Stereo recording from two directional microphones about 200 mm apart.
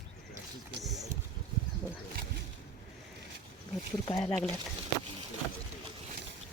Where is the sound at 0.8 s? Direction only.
Centre (ahead or behind).